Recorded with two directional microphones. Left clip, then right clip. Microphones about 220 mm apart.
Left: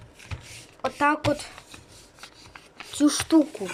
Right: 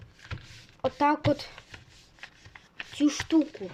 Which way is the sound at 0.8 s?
20° right (ahead or behind).